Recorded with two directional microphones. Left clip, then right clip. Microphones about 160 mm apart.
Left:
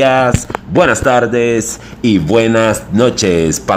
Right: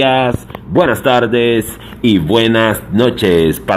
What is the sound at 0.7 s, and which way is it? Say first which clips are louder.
Speech: left 1 dB; 25° left (ahead or behind).